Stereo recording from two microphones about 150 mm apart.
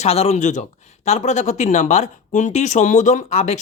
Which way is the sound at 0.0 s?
45° left (ahead or behind).